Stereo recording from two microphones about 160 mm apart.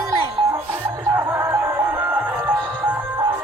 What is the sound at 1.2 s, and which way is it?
Music, 15° right (ahead or behind).